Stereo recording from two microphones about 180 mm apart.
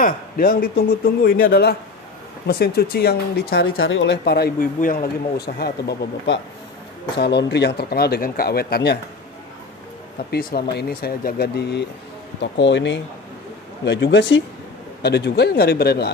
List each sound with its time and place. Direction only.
0.0 s speech: 50° left (ahead or behind)
4.7 s speech: 50° left (ahead or behind)
10.3 s speech: 60° left (ahead or behind)
12.4 s speech: 75° left (ahead or behind)
15.0 s speech: 70° left (ahead or behind)